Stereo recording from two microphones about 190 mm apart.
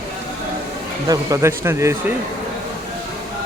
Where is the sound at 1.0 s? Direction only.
15° right (ahead or behind).